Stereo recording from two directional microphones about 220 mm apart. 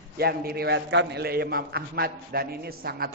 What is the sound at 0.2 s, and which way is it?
Mantra, 45° right (ahead or behind).